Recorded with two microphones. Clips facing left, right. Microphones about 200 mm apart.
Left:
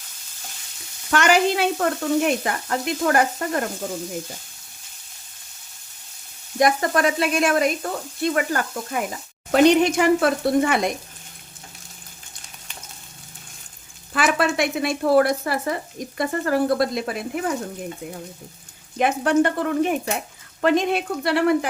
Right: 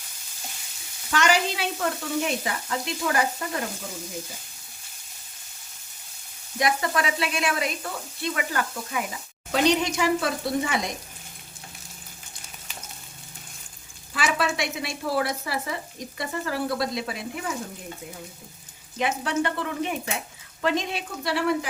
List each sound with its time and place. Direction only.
1.1 s speech: 55° left (ahead or behind)
6.6 s speech: 45° left (ahead or behind)
14.1 s speech: 55° left (ahead or behind)
18.9 s speech: 55° left (ahead or behind)